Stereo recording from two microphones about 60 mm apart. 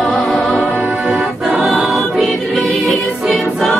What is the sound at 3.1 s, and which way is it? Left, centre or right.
Music, centre.